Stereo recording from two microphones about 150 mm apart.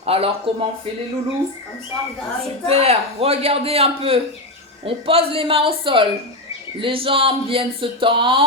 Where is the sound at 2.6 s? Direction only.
45° right (ahead or behind).